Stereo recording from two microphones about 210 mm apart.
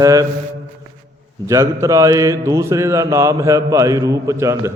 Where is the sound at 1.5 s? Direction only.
15° right (ahead or behind).